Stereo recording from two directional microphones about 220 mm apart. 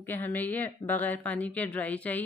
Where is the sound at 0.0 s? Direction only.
10° left (ahead or behind).